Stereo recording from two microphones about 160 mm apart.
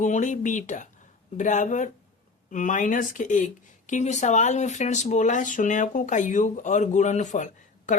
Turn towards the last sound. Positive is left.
turn(degrees=50)  # may be behind; listen again after turning